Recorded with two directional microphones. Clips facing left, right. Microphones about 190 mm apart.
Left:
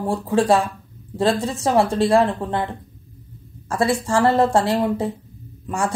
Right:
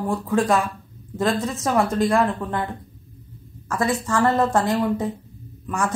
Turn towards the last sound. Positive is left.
turn(degrees=30)  # may be behind; listen again after turning